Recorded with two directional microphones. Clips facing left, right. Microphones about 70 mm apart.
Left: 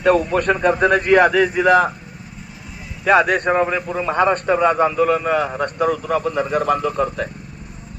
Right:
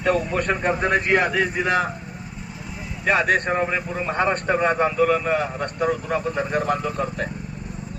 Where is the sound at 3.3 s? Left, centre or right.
Left.